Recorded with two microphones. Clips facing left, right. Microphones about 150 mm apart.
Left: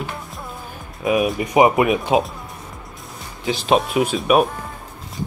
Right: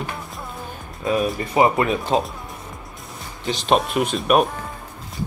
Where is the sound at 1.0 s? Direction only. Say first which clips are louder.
Left 3 dB; 15° left (ahead or behind).